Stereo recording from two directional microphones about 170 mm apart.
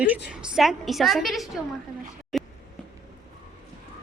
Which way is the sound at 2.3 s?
Centre (ahead or behind).